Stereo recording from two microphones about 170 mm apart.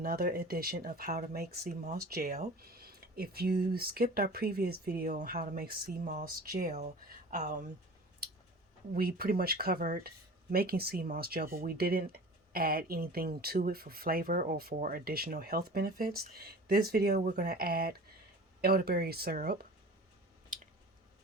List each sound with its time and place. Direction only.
0.0 s speech: 65° right (ahead or behind); by 7.7 s 45° right (ahead or behind)
8.9 s speech: 60° right (ahead or behind)
20.5 s a sound: 55° right (ahead or behind)